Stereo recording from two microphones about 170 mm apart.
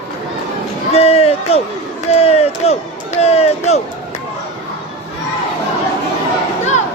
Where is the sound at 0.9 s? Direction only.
35° left (ahead or behind).